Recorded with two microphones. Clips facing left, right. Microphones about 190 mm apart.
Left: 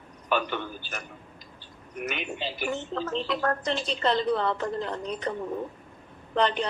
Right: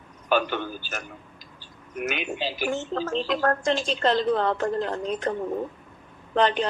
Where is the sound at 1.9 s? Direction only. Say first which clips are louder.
Right 4 dB; 90° right.